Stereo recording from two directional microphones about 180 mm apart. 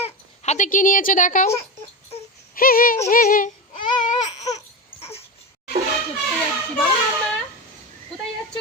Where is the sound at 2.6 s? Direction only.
55° left (ahead or behind).